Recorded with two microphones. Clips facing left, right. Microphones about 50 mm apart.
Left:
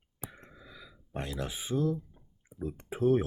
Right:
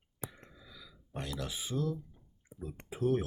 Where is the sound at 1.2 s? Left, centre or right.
Left.